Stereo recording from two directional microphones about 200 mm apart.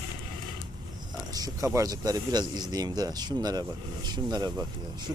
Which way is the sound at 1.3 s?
15° right (ahead or behind).